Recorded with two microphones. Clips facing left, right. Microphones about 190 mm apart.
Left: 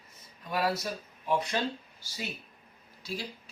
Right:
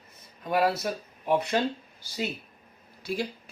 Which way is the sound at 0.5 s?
60° right (ahead or behind).